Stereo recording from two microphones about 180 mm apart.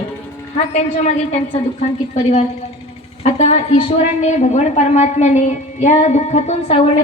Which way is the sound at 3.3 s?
35° left (ahead or behind).